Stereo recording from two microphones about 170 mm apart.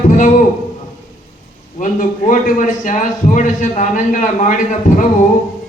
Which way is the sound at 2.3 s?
50° left (ahead or behind).